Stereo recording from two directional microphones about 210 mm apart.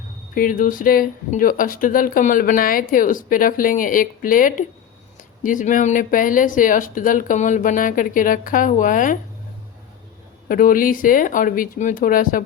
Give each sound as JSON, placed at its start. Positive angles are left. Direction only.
{"t": 0.3, "sound": "speech", "side_deg": 40}
{"t": 10.5, "sound": "speech", "side_deg": 40}